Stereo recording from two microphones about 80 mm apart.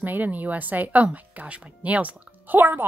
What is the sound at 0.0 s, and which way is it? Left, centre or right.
Speech, right.